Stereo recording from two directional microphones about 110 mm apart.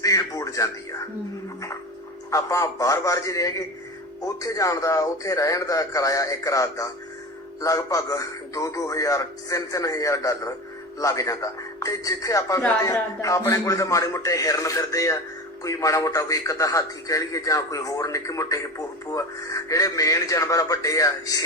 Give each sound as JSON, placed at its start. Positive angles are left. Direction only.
{"t": 0.0, "sound": "music", "side_deg": 30}
{"t": 2.3, "sound": "a man's voice", "side_deg": 30}